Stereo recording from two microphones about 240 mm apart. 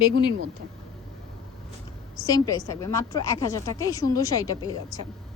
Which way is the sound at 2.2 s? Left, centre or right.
Centre.